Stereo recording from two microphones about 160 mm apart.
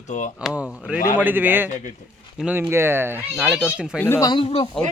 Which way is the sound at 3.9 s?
10° left (ahead or behind).